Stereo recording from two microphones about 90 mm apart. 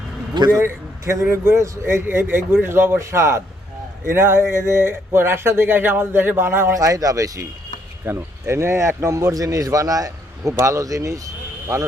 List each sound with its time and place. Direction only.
0.5 s a man's voice: 35° right (ahead or behind)
6.7 s a man's voice: 40° right (ahead or behind)
8.0 s a man's voice: 30° right (ahead or behind)